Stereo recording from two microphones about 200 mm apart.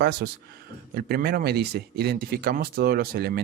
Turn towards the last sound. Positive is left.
turn(degrees=-50)  # may be behind; listen again after turning